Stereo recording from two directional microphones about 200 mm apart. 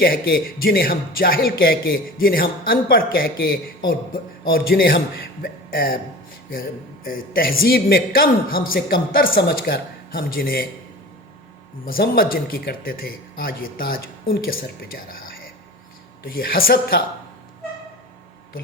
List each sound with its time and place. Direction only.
0.0 s a man's voice: 50° left (ahead or behind)
5.4 s a sound: 45° left (ahead or behind)
6.5 s a man's voice: 45° left (ahead or behind)
11.9 s a man's voice: 50° left (ahead or behind)